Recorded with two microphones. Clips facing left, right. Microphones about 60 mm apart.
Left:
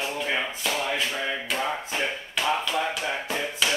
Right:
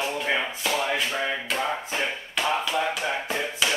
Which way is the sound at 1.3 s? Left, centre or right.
Centre.